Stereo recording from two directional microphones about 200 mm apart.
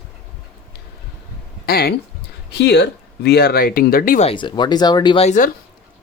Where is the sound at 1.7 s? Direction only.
50° left (ahead or behind).